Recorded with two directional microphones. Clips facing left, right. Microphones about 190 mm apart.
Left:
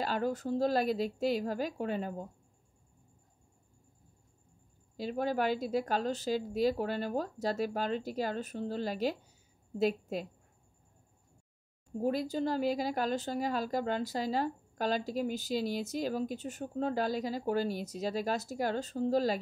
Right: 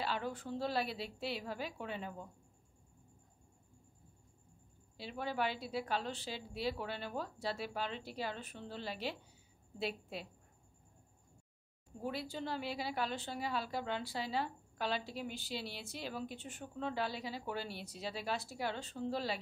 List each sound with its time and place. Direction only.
0.0 s a woman's voice: 45° left (ahead or behind)
4.9 s a woman's voice: 45° left (ahead or behind)
12.0 s a woman's voice: 40° left (ahead or behind)